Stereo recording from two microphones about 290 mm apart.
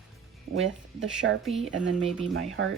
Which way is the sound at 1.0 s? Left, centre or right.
Right.